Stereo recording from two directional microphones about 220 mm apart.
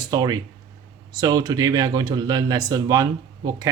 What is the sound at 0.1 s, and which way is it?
Speech, 20° right (ahead or behind).